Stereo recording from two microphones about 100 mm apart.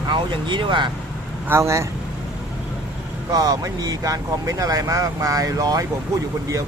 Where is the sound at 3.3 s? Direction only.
40° right (ahead or behind).